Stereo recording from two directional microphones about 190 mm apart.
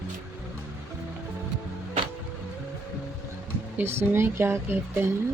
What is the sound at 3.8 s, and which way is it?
Speech, 10° right (ahead or behind).